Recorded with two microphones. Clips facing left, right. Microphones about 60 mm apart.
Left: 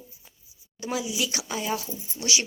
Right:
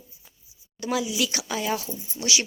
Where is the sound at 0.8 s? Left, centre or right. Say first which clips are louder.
Right 3 dB; centre.